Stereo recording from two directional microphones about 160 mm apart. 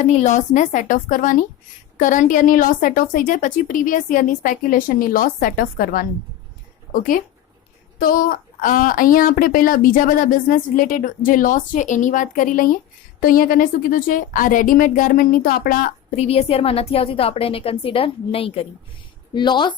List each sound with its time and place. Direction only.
0.0 s a woman's voice: 45° left (ahead or behind); by 6.1 s 65° left (ahead or behind)
7.9 s a woman's voice: 60° left (ahead or behind)
16.1 s a woman's voice: 40° left (ahead or behind)